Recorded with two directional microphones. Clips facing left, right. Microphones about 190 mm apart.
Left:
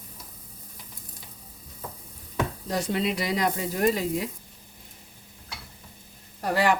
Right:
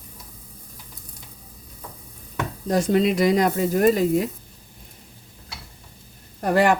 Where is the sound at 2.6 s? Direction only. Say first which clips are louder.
Right 10 dB; 50° right (ahead or behind).